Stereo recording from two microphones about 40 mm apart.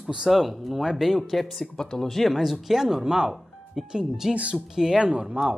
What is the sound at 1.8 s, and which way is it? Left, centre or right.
Speech, centre.